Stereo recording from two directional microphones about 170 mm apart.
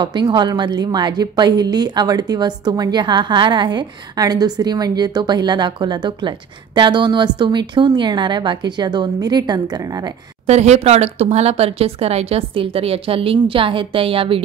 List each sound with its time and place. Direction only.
0.0 s a woman's voice: 25° right (ahead or behind)
10.4 s speech: 40° right (ahead or behind)